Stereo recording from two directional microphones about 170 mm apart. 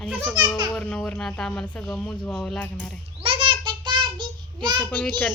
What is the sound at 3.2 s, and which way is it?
Child singing, 30° right (ahead or behind).